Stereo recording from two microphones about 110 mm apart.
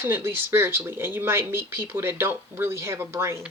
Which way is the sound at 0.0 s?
20° right (ahead or behind).